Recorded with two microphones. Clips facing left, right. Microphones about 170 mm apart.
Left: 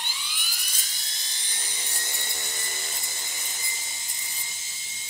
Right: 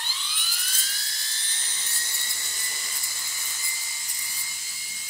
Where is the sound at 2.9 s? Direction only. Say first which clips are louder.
Left 3 dB; 20° left (ahead or behind).